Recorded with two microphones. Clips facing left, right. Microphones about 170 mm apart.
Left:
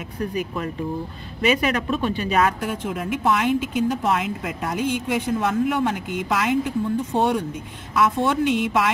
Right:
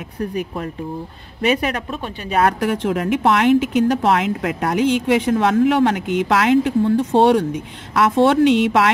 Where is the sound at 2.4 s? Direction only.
70° right (ahead or behind).